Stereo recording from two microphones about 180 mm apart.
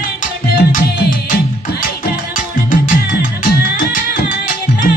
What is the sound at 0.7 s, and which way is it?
Music, 55° left (ahead or behind).